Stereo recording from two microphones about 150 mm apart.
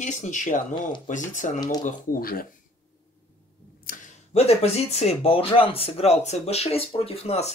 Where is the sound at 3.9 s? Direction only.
70° left (ahead or behind).